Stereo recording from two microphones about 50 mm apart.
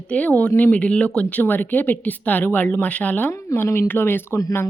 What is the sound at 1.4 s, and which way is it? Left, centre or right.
Speech, left.